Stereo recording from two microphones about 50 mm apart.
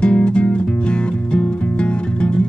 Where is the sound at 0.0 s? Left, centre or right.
Centre.